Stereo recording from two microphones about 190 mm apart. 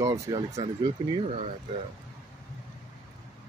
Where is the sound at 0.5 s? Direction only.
30° right (ahead or behind).